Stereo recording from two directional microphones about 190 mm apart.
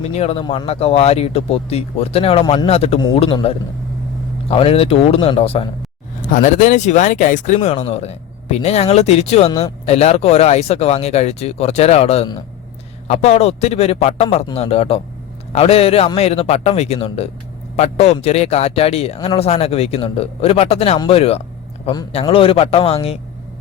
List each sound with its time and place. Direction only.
0.1 s speech: 35° left (ahead or behind)
9.5 s a man's voice: 20° left (ahead or behind)
9.8 s a man's voice: 35° left (ahead or behind)